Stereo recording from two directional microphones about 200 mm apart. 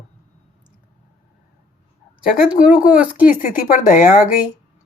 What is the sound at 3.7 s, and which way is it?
Speech, 40° left (ahead or behind).